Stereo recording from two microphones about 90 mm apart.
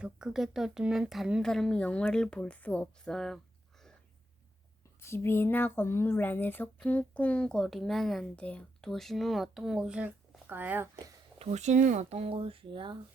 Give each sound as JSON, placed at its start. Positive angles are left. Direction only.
{"t": 0.0, "sound": "speech", "side_deg": -10}
{"t": 4.9, "sound": "speech", "side_deg": 30}
{"t": 8.4, "sound": "speech", "side_deg": 15}
{"t": 8.9, "sound": "speech", "side_deg": 0}
{"t": 12.2, "sound": "speech", "side_deg": -90}